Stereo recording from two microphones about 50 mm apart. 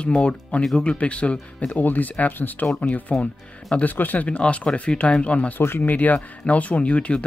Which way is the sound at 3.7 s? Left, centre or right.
Left.